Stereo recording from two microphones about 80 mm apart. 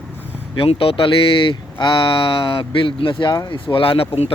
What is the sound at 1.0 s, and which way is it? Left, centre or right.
Speech, left.